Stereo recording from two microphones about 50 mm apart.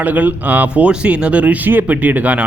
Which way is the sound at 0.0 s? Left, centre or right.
Right.